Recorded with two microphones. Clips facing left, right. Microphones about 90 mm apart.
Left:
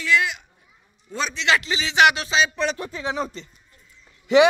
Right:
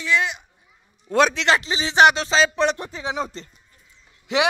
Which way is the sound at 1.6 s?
35° right (ahead or behind).